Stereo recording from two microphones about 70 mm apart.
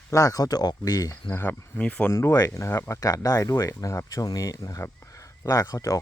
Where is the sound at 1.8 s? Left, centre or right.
Centre.